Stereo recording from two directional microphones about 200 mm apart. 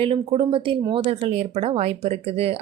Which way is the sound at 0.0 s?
25° right (ahead or behind).